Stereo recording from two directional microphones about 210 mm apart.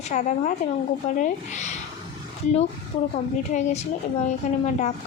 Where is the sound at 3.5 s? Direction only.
35° left (ahead or behind).